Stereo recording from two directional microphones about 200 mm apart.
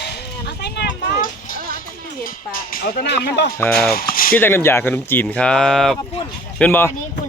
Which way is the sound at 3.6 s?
5° left (ahead or behind).